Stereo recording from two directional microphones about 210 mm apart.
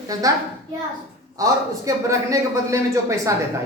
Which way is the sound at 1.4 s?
15° right (ahead or behind).